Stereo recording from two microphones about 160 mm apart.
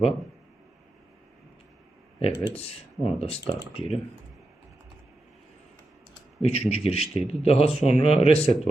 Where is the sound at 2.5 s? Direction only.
40° left (ahead or behind).